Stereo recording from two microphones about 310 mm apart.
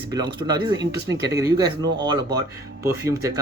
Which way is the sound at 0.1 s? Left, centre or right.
Centre.